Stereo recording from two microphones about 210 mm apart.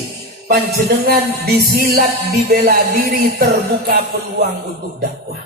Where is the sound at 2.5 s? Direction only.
45° right (ahead or behind).